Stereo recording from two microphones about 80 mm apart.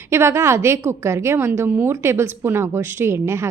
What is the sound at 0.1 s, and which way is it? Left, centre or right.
A woman's voice, right.